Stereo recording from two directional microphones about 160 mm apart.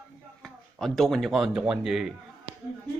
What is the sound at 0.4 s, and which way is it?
Speech, centre (ahead or behind).